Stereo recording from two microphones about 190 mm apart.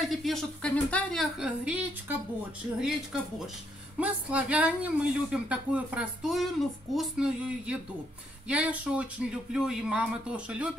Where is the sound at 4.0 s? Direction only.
5° right (ahead or behind).